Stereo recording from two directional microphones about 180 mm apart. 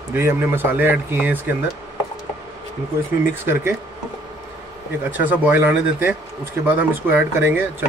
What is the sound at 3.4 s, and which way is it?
Speech, 15° right (ahead or behind).